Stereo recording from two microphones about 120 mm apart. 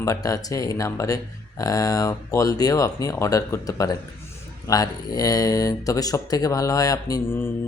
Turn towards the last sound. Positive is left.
turn(degrees=30)  # may be behind; listen again after turning